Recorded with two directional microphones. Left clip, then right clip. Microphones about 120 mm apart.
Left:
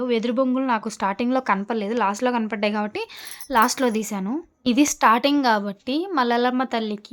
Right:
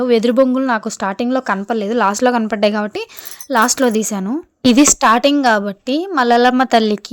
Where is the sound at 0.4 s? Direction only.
40° right (ahead or behind).